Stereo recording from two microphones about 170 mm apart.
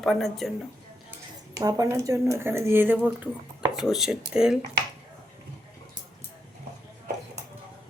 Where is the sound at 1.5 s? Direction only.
20° right (ahead or behind); by 4.5 s 5° right (ahead or behind).